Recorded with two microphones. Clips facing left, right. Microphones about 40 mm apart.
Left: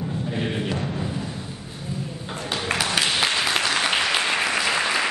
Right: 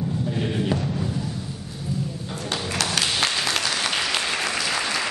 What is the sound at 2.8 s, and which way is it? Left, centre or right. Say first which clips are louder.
Applause: even; centre.